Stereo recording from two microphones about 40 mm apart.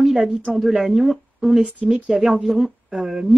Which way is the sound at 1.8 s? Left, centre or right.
Centre.